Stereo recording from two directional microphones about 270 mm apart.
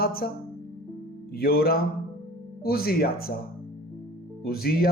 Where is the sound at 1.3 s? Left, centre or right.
Left.